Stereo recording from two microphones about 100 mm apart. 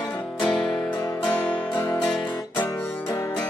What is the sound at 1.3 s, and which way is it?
Music, 15° left (ahead or behind).